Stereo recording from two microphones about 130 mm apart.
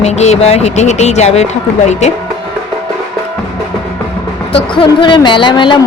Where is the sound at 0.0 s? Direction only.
55° left (ahead or behind).